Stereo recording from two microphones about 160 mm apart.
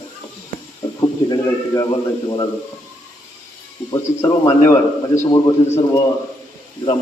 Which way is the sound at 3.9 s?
15° left (ahead or behind).